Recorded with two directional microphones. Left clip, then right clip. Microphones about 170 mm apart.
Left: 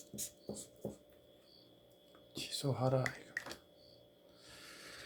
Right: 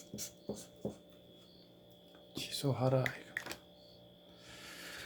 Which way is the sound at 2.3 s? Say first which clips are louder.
Right 2 dB; centre (ahead or behind).